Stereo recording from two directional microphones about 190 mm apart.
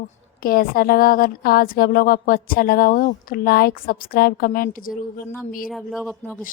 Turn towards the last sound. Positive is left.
turn(degrees=0)  # may be behind; listen again after turning